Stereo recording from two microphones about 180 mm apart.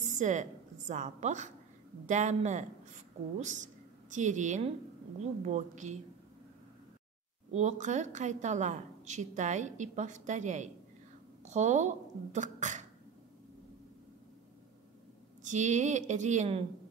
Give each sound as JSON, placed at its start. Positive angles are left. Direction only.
{"t": 0.2, "sound": "a woman's voice", "side_deg": -40}
{"t": 7.5, "sound": "a woman's voice", "side_deg": -40}
{"t": 15.4, "sound": "a woman's voice", "side_deg": -40}